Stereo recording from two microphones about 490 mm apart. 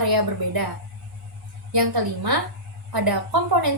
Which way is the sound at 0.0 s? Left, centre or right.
Right.